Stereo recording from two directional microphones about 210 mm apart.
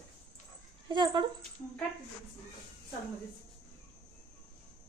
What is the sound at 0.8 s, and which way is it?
Speech, 20° right (ahead or behind).